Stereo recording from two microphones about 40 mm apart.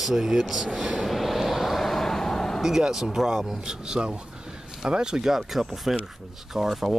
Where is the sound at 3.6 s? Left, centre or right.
Centre.